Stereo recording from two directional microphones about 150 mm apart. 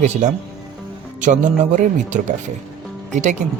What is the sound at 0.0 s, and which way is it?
Speech, 55° right (ahead or behind).